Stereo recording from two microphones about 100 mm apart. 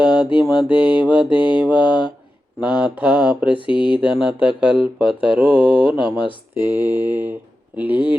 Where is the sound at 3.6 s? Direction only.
55° left (ahead or behind).